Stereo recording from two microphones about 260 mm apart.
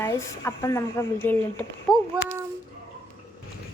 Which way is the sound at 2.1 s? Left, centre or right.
Centre.